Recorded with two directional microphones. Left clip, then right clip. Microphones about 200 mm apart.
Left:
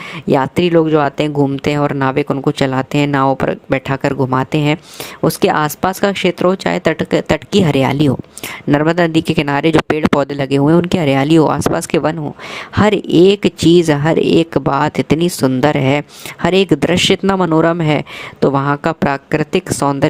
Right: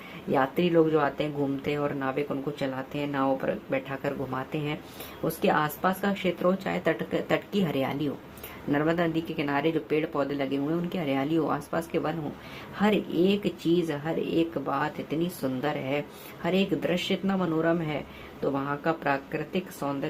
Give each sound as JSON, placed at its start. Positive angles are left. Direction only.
{"t": 0.3, "sound": "speech", "side_deg": 45}